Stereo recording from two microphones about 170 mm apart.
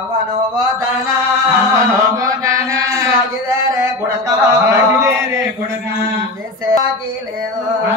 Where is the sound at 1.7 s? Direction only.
20° right (ahead or behind).